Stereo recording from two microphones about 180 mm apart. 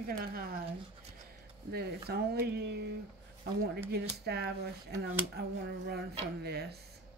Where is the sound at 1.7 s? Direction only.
60° right (ahead or behind).